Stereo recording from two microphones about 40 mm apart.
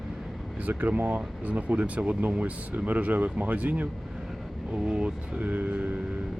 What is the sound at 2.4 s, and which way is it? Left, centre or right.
Speech, right.